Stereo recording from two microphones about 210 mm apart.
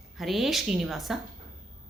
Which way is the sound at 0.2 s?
Centre (ahead or behind).